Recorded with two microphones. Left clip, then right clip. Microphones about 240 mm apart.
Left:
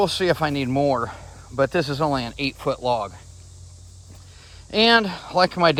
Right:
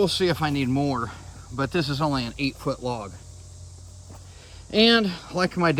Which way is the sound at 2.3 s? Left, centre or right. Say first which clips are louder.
Left 3 dB; centre.